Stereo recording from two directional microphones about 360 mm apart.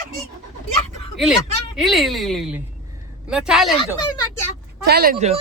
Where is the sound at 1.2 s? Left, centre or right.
Centre.